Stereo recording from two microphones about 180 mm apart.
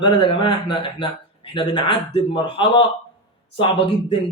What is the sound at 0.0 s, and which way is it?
Speech, 25° left (ahead or behind).